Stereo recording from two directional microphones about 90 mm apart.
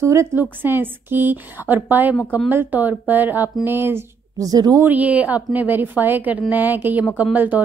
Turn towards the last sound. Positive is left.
turn(degrees=-20)  # may be behind; listen again after turning